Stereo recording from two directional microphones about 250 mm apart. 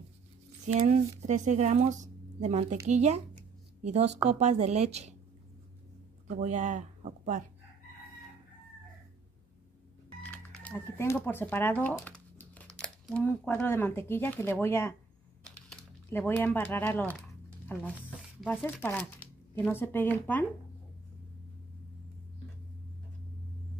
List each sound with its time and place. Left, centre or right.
0.7 s speech: right
6.2 s speech: right
10.3 s speech: centre
15.4 s a sound: centre
17.6 s speech: centre